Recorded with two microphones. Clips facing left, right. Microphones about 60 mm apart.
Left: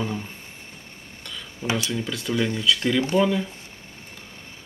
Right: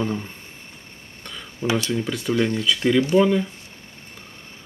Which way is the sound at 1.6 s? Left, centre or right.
Centre.